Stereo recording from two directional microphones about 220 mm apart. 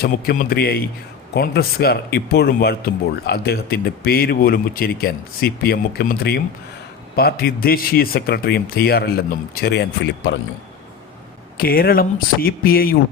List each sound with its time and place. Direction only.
0.0 s a man's voice: 45° left (ahead or behind)
11.5 s a man's voice: 45° left (ahead or behind)